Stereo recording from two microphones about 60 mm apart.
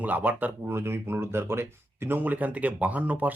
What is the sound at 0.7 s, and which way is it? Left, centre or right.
Speech, right.